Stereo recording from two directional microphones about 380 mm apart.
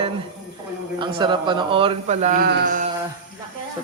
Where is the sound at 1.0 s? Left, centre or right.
Centre.